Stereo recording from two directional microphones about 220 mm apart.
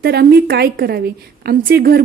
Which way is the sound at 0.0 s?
45° right (ahead or behind).